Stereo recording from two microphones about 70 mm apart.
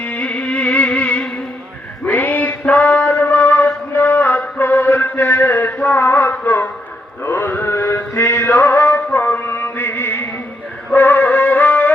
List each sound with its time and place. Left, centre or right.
0.0 s music: centre
2.0 s a sound: left
7.3 s chant: left
9.1 s music: left